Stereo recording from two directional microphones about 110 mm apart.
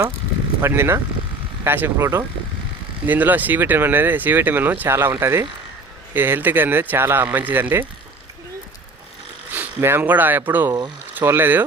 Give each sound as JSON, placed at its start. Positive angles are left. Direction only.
{"t": 0.6, "sound": "speech", "side_deg": -25}
{"t": 9.5, "sound": "speech", "side_deg": -20}
{"t": 10.7, "sound": "speech", "side_deg": -40}
{"t": 11.1, "sound": "speech", "side_deg": -20}